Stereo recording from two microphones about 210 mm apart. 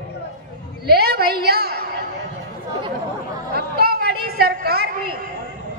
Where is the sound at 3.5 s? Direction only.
50° right (ahead or behind).